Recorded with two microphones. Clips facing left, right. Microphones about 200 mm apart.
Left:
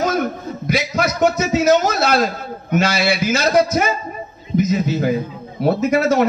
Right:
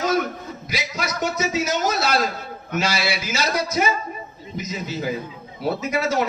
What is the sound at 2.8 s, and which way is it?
A man's voice, 55° left (ahead or behind).